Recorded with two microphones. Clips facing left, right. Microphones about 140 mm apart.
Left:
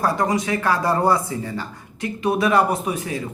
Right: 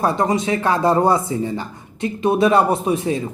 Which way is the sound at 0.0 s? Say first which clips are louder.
Right 2 dB; 25° right (ahead or behind).